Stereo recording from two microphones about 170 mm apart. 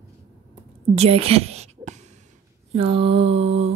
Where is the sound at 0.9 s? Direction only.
35° right (ahead or behind).